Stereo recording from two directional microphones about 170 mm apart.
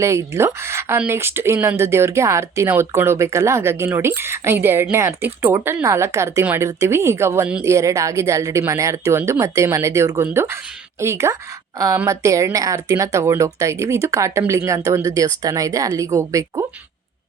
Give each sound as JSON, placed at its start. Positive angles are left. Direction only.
{"t": 0.0, "sound": "speech", "side_deg": -15}